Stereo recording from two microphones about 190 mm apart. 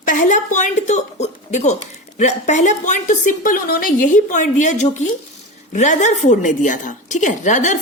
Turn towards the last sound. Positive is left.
turn(degrees=40)  # may be behind; listen again after turning